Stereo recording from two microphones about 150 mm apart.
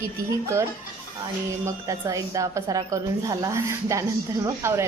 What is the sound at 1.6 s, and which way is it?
Speech, 20° right (ahead or behind).